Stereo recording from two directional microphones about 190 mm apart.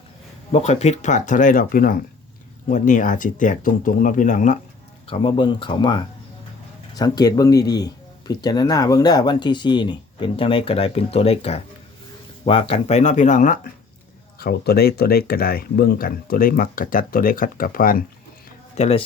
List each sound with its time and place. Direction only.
0.5 s speech: 35° left (ahead or behind)
5.0 s speech: 30° left (ahead or behind)
14.3 s speech: 55° left (ahead or behind)
18.8 s speech: 30° left (ahead or behind)